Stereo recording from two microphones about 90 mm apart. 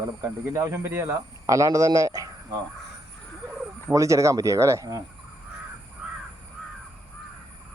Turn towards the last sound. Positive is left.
turn(degrees=-10)  # may be behind; listen again after turning